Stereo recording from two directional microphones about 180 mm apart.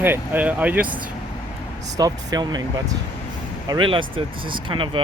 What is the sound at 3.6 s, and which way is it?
Speech, 25° right (ahead or behind).